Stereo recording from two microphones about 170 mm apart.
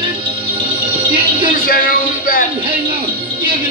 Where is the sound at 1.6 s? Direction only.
55° left (ahead or behind).